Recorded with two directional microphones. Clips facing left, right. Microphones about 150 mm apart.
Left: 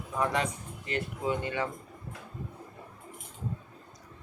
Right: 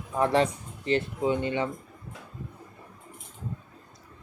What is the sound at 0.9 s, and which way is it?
Speech, 25° right (ahead or behind).